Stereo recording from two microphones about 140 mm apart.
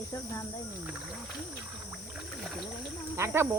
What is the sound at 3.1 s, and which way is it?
Speech, 20° right (ahead or behind).